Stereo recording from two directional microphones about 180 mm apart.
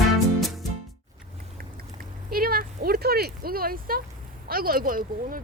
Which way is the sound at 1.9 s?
55° right (ahead or behind).